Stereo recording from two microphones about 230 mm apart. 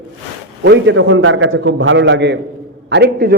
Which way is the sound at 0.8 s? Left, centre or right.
Right.